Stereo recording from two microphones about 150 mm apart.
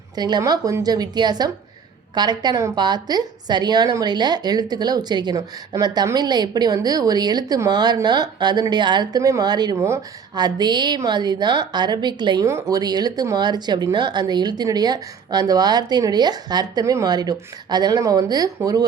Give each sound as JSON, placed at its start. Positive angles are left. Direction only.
{"t": 0.2, "sound": "a woman's voice", "side_deg": -25}
{"t": 12.5, "sound": "a woman's voice", "side_deg": -20}